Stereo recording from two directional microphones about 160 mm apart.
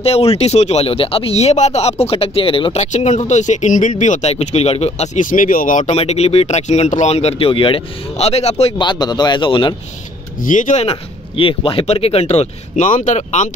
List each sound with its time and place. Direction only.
0.0 s speech: 40° left (ahead or behind)
8.8 s speech: 25° left (ahead or behind)
10.4 s speech: 55° left (ahead or behind)